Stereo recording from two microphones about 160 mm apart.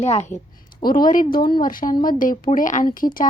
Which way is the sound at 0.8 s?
65° left (ahead or behind).